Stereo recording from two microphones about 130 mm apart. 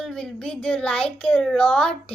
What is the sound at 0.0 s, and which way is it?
Speech, 5° left (ahead or behind).